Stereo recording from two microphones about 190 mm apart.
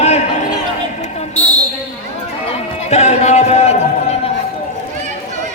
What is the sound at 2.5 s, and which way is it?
Music, 35° left (ahead or behind).